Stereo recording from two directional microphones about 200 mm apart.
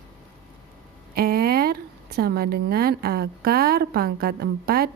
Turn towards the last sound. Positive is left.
turn(degrees=-50)  # may be behind; listen again after turning